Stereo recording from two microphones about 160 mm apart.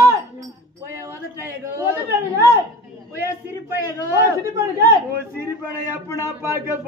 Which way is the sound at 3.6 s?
20° right (ahead or behind).